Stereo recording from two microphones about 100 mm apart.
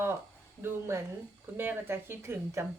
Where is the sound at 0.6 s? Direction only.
25° right (ahead or behind).